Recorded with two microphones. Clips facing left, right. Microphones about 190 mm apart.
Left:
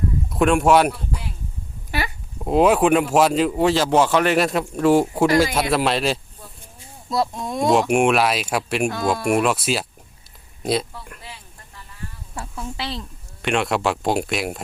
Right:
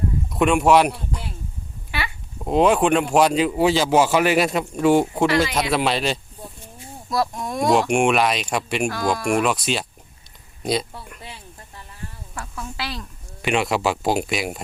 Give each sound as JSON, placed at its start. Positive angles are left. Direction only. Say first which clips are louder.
{"t": 0.3, "sound": "speech", "louder": "even", "side_deg": 0}
{"t": 1.9, "sound": "a sound", "louder": "left 3 dB", "side_deg": 40}
{"t": 2.4, "sound": "speech", "louder": "left 1 dB", "side_deg": 0}
{"t": 7.1, "sound": "speech", "louder": "left 1 dB", "side_deg": 25}
{"t": 7.7, "sound": "speech", "louder": "left 1 dB", "side_deg": 0}
{"t": 12.3, "sound": "speech", "louder": "left 2 dB", "side_deg": 25}
{"t": 13.4, "sound": "speech", "louder": "even", "side_deg": 0}